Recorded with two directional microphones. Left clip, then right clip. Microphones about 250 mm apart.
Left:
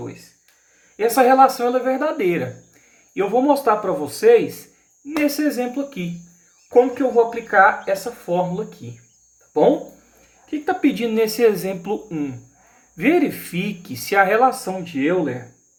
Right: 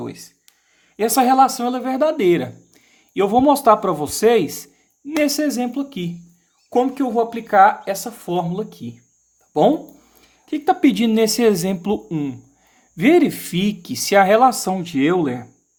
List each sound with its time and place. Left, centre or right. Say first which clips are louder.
0.9 s a man's voice: left 1 dB; right